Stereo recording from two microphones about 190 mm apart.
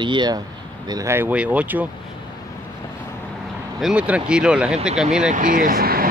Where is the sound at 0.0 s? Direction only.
25° right (ahead or behind); by 1.9 s 10° right (ahead or behind).